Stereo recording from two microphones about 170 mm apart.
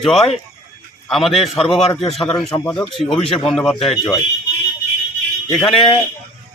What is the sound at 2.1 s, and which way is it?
A man's voice, 5° left (ahead or behind).